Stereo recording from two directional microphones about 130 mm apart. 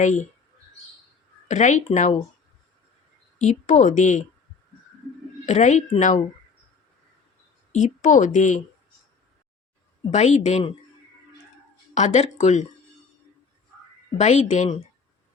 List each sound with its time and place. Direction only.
0.0 s speech: 65° left (ahead or behind)
1.5 s speech: 65° left (ahead or behind)
3.3 s speech: 65° left (ahead or behind)
5.5 s speech: 65° left (ahead or behind)
7.7 s speech: 75° left (ahead or behind)
10.1 s speech: 60° left (ahead or behind)
11.9 s speech: 60° left (ahead or behind)
14.2 s speech: 65° left (ahead or behind)